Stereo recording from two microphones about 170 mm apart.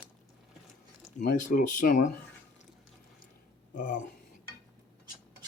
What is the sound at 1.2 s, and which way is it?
Speech, 55° left (ahead or behind).